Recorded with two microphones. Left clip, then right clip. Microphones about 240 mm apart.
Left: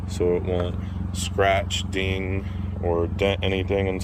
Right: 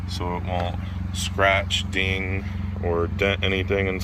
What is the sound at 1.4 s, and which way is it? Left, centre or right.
Speech, centre.